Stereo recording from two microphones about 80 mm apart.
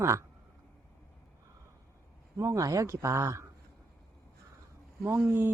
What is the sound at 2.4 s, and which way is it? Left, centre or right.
Speech, right.